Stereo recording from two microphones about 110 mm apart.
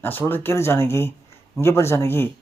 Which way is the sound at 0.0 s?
20° left (ahead or behind).